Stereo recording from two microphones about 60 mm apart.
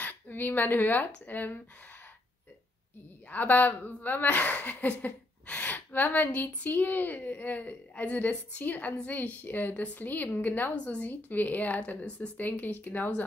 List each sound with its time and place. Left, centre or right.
0.0 s speech: left
3.3 s a woman's voice: left